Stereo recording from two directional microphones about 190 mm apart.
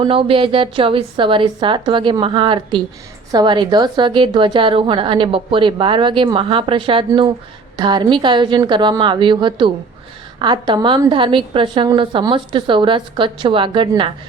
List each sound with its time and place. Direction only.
0.0 s a woman's voice: 30° right (ahead or behind)